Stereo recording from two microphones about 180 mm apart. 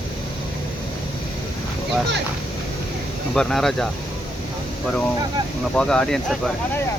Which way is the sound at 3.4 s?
5° left (ahead or behind).